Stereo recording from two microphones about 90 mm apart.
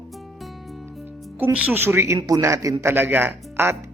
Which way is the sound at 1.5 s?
20° right (ahead or behind).